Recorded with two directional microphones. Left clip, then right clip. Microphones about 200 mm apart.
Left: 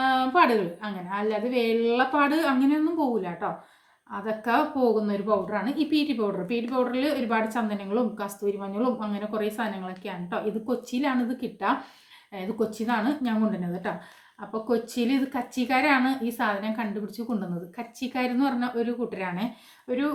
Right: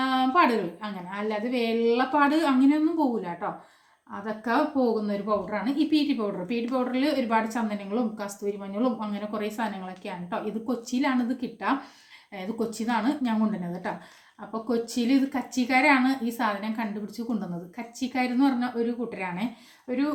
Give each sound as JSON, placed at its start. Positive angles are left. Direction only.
{"t": 0.0, "sound": "a woman's voice", "side_deg": 5}